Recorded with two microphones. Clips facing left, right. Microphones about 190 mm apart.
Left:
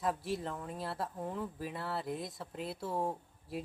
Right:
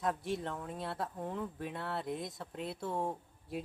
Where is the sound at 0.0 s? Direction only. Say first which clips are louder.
Even; centre (ahead or behind).